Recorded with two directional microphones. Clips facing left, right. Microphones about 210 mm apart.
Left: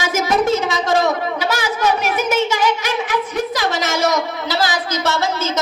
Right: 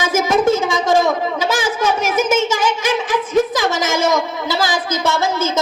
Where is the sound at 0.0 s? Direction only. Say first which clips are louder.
Right 2 dB; 50° right (ahead or behind).